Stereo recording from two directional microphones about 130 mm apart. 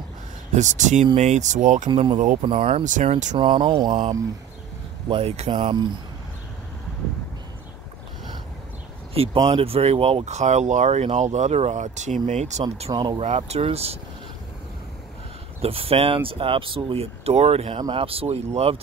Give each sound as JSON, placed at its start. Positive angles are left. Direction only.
{"t": 0.6, "sound": "speech", "side_deg": -65}
{"t": 1.9, "sound": "speech", "side_deg": -40}
{"t": 2.8, "sound": "speech", "side_deg": -70}
{"t": 3.3, "sound": "speech", "side_deg": -40}
{"t": 5.5, "sound": "speech", "side_deg": -40}
{"t": 9.1, "sound": "speech", "side_deg": -45}
{"t": 12.9, "sound": "speech", "side_deg": -35}
{"t": 13.2, "sound": "speech", "side_deg": -55}
{"t": 15.6, "sound": "speech", "side_deg": -50}